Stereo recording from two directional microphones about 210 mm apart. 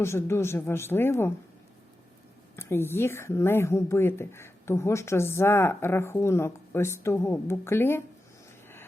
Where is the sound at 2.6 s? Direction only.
10° left (ahead or behind).